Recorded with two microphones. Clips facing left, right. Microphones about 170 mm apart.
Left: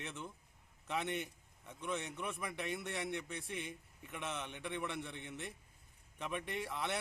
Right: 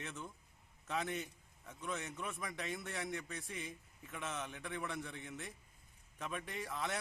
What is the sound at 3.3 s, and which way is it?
Speech, 65° left (ahead or behind).